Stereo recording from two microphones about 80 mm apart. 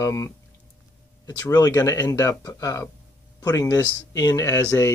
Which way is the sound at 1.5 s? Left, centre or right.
Left.